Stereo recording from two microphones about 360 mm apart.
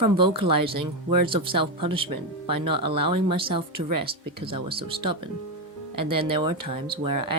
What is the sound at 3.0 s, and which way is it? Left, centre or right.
Speech, right.